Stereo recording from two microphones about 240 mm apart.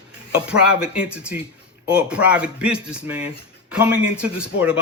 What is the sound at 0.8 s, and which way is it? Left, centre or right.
Speech, centre.